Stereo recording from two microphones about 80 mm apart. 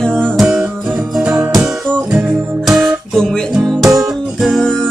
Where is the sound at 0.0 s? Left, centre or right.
Centre.